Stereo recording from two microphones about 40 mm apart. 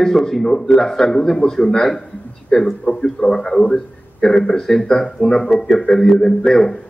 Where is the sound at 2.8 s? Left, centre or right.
Centre.